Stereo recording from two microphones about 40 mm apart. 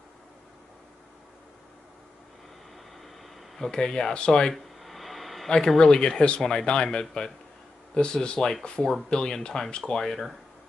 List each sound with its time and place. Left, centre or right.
3.7 s speech: centre
4.8 s a sound: centre
5.8 s speech: left